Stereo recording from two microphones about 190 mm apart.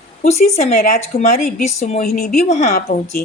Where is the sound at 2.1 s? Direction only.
50° left (ahead or behind).